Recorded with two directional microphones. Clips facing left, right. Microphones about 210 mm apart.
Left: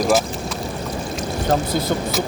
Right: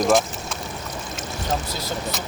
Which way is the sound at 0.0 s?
Centre (ahead or behind).